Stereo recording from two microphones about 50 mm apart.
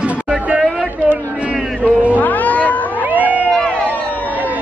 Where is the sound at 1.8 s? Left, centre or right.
Right.